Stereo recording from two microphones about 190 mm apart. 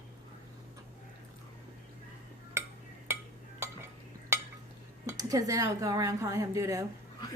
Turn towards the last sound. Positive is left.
turn(degrees=-15)  # may be behind; listen again after turning